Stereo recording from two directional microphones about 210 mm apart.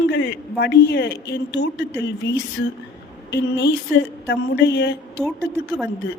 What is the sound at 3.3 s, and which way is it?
A woman's voice, 55° left (ahead or behind).